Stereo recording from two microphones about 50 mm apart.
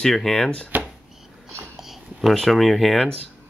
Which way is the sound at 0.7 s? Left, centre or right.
Right.